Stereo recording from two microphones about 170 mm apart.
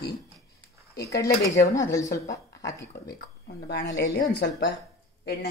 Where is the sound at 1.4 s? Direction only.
20° left (ahead or behind).